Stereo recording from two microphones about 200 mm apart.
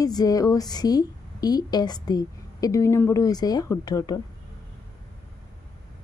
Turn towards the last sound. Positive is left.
turn(degrees=20)  # may be behind; listen again after turning